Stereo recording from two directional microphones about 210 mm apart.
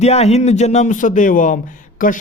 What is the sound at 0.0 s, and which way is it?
A man's voice, 30° left (ahead or behind).